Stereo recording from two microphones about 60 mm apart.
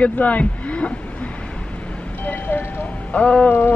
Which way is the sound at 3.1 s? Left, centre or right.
Left.